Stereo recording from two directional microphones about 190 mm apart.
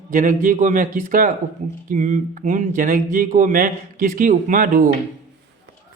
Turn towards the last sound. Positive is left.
turn(degrees=-45)  # may be behind; listen again after turning